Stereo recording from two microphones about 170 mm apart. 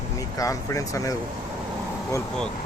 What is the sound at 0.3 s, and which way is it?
Speech, 20° left (ahead or behind).